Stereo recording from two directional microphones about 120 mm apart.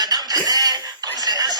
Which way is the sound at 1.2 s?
35° right (ahead or behind).